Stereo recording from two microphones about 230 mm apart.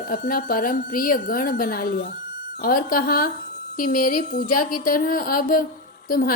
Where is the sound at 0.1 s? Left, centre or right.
Left.